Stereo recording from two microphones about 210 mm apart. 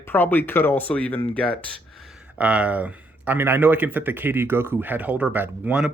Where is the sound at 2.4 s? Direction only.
5° right (ahead or behind).